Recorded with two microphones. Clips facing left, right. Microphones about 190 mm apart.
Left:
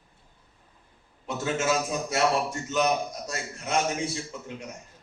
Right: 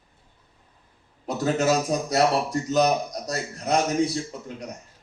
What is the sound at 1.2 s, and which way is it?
A man's voice, 40° right (ahead or behind).